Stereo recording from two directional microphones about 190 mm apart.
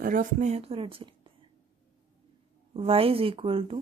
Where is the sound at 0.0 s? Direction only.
45° right (ahead or behind); by 1.3 s 30° right (ahead or behind).